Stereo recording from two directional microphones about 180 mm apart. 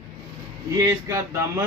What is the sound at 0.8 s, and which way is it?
Speech, 20° right (ahead or behind).